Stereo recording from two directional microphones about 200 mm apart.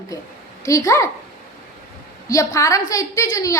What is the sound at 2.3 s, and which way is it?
A woman's voice, 15° left (ahead or behind).